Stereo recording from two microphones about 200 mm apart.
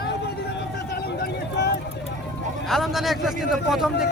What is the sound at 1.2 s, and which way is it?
Speech, 55° left (ahead or behind).